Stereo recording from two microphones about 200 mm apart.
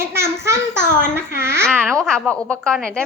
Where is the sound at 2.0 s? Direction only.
5° left (ahead or behind).